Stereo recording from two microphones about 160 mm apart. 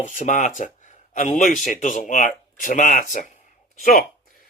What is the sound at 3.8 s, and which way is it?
Speech, 70° left (ahead or behind).